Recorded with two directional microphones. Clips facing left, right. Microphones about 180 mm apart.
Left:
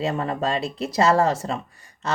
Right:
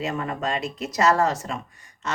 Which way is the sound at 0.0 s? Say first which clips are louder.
Left 3 dB; 30° left (ahead or behind).